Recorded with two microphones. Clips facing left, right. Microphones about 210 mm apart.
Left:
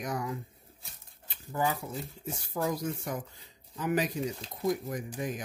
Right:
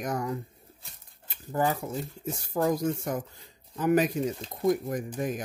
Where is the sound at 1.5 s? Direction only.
45° right (ahead or behind).